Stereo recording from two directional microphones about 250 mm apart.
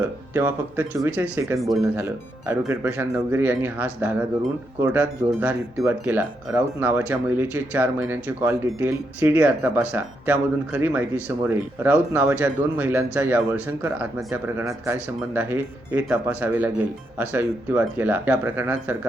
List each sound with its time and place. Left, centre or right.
0.3 s speech: centre